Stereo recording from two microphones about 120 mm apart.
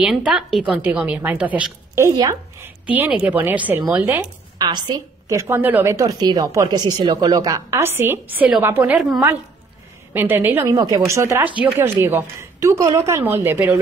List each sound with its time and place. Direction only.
0.0 s a woman's voice: 10° right (ahead or behind)
2.0 s a woman's voice: 20° right (ahead or behind)
4.6 s a woman's voice: 40° right (ahead or behind)
5.3 s a woman's voice: 20° right (ahead or behind)
10.1 s a woman's voice: 15° right (ahead or behind)
10.8 s speech: 30° right (ahead or behind)